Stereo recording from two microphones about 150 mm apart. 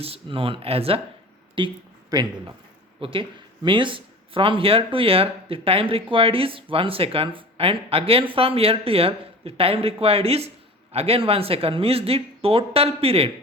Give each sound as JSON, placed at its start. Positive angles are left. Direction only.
{"t": 0.0, "sound": "speech", "side_deg": -40}